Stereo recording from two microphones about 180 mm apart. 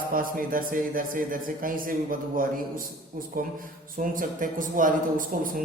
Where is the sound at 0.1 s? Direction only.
50° right (ahead or behind).